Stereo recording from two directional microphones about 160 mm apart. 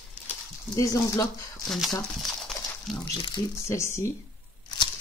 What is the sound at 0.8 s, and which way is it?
Speech, 20° left (ahead or behind).